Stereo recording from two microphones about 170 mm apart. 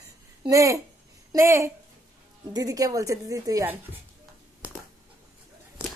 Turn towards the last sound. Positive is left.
turn(degrees=-15)  # may be behind; listen again after turning